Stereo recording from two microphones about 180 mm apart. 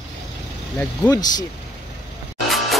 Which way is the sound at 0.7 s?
10° left (ahead or behind).